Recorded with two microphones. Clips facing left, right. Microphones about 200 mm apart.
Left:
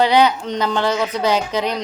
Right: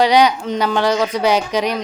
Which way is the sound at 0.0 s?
15° right (ahead or behind).